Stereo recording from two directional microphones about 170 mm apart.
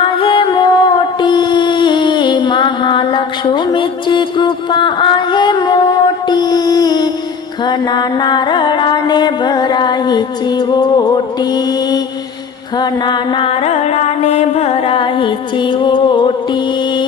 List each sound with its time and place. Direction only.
0.0 s music: 30° left (ahead or behind)